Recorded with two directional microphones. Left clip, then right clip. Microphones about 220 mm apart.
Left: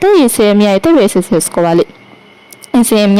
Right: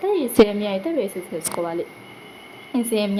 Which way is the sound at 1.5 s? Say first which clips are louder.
Left 13 dB; centre (ahead or behind).